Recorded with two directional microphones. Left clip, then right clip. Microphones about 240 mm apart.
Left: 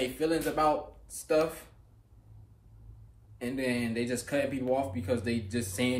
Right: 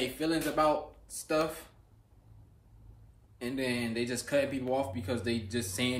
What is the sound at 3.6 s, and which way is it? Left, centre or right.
Speech, centre.